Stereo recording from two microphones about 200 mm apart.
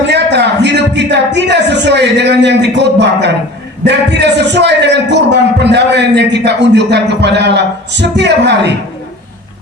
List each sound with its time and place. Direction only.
0.1 s a man's voice: 60° right (ahead or behind)